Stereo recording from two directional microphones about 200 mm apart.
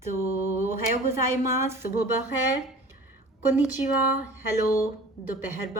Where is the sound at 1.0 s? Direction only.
15° right (ahead or behind).